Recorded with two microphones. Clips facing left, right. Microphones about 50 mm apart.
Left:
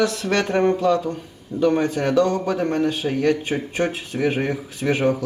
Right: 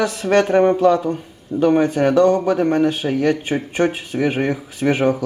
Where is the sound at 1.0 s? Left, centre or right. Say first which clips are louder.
Right 5 dB; centre.